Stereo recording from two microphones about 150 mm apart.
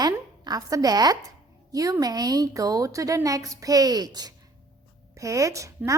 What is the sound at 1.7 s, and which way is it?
A woman's voice, 25° right (ahead or behind).